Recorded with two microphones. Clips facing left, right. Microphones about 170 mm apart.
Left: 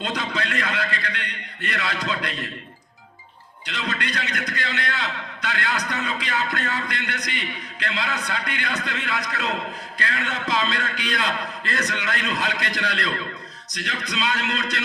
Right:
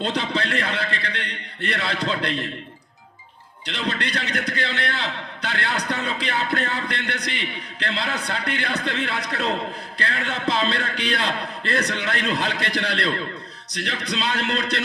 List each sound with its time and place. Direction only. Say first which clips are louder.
0.0 s a man's voice: right 3 dB; 30° right (ahead or behind)
3.7 s a man's voice: right 2 dB; 30° right (ahead or behind)